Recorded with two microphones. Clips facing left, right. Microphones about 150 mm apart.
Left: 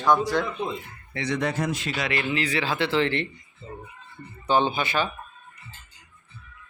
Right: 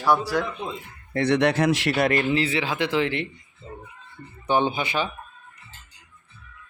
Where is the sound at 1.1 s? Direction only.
60° right (ahead or behind).